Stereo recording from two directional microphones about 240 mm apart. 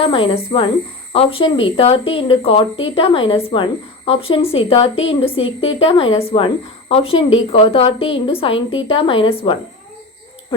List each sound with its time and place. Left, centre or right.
0.0 s speech: left